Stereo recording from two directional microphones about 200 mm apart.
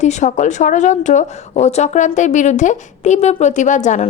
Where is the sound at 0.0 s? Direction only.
35° left (ahead or behind).